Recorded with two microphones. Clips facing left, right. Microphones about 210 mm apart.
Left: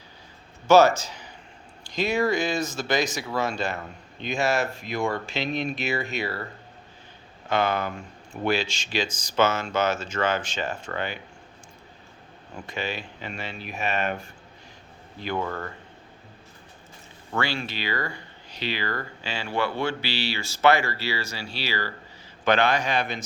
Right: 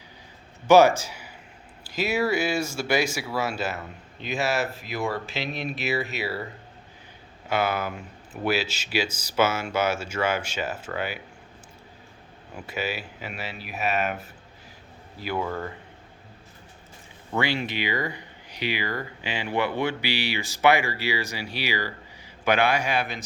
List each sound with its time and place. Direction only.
0.7 s speech: 10° right (ahead or behind)
7.4 s speech: 10° right (ahead or behind)
12.5 s speech: 5° right (ahead or behind)
17.3 s speech: 20° right (ahead or behind)